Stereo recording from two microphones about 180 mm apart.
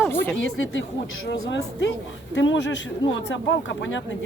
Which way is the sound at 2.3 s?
90° left.